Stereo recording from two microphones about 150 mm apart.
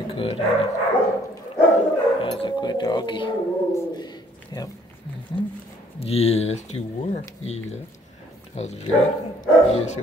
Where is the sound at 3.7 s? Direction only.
30° left (ahead or behind).